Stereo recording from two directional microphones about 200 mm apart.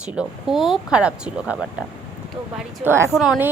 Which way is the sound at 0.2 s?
Centre (ahead or behind).